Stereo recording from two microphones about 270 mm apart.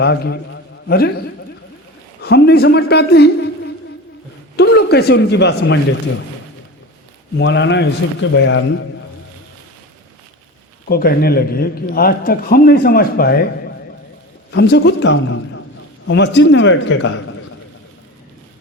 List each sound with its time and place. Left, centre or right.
0.0 s a man's voice: left
2.2 s a man's voice: left
4.5 s a man's voice: left
7.3 s a man's voice: left
10.8 s a man's voice: left
14.5 s a man's voice: left